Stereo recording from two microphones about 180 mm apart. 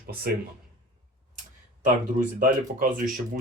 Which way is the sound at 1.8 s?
45° right (ahead or behind).